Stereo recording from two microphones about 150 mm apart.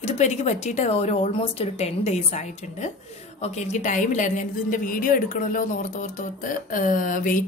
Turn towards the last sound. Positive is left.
turn(degrees=60)  # may be behind; listen again after turning